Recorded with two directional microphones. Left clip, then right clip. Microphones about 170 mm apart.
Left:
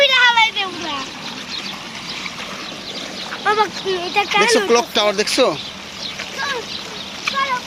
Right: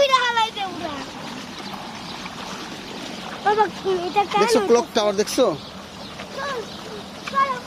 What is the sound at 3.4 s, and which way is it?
Speech, 50° right (ahead or behind).